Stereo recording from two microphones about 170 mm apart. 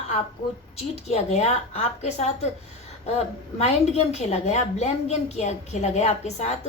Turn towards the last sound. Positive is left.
turn(degrees=40)  # may be behind; listen again after turning